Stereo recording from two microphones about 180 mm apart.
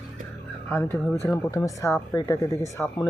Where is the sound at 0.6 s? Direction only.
10° left (ahead or behind).